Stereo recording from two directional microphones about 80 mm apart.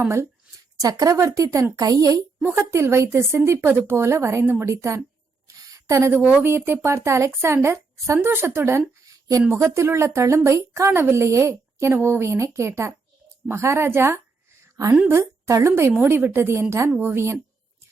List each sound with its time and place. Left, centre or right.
0.8 s speech: right
2.6 s a woman's voice: right
16.9 s speech: right